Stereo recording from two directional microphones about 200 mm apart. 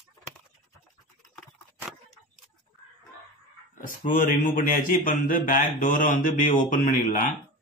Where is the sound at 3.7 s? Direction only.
40° left (ahead or behind).